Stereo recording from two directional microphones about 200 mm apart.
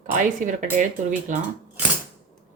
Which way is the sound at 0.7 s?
40° right (ahead or behind).